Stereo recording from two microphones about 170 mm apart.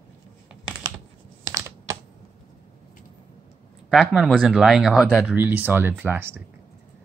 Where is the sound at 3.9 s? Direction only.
Centre (ahead or behind).